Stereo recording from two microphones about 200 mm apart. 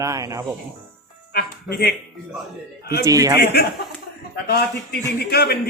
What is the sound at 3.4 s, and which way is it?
Speech, 55° left (ahead or behind).